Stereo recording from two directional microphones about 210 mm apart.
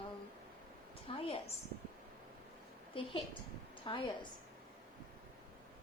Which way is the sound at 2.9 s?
25° left (ahead or behind).